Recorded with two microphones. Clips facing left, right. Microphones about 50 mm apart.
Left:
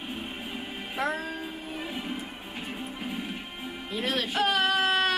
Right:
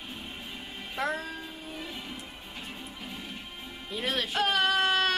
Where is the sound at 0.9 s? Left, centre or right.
Centre.